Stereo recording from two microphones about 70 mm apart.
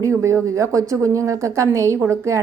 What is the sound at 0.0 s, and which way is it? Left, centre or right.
A woman's voice, right.